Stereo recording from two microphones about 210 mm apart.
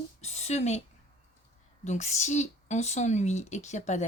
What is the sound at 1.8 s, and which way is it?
Speech, 35° left (ahead or behind).